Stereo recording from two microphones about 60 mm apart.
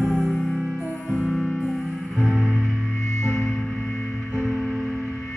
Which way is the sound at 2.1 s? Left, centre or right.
Centre.